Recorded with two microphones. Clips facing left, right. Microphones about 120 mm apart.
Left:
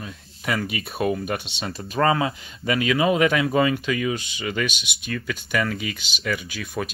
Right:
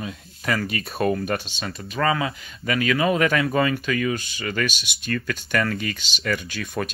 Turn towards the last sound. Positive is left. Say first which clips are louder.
# right 1 dB
turn(degrees=10)  # may be behind; listen again after turning